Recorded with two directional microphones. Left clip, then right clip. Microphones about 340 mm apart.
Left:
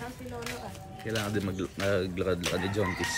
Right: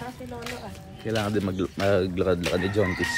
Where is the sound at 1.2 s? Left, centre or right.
Centre.